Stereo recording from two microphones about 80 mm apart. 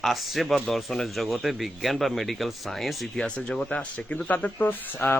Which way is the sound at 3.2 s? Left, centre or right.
Centre.